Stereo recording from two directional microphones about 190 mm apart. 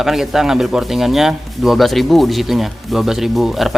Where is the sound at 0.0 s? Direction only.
Centre (ahead or behind).